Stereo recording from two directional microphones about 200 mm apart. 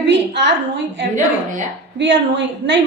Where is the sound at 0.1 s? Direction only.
60° right (ahead or behind).